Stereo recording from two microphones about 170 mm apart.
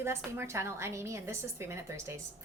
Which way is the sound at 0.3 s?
15° right (ahead or behind).